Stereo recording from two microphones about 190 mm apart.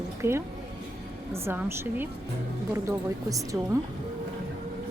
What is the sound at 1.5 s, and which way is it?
Speech, 10° right (ahead or behind).